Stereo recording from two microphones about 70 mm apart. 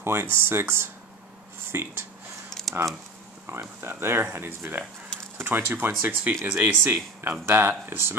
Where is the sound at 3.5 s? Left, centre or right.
Right.